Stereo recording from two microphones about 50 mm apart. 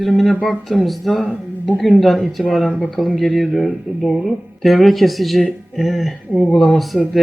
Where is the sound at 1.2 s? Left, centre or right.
Left.